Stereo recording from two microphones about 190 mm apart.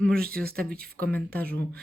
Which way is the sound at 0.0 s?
5° left (ahead or behind).